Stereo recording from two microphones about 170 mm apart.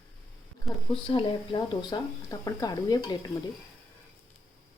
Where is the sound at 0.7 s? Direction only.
Centre (ahead or behind).